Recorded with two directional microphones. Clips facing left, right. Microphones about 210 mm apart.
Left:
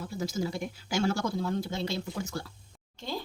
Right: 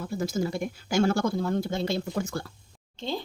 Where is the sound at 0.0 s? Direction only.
50° right (ahead or behind).